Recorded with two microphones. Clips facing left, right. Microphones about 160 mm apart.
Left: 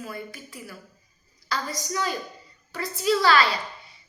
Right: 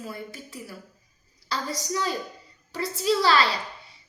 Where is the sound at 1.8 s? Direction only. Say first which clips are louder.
Right 1 dB; 80° right.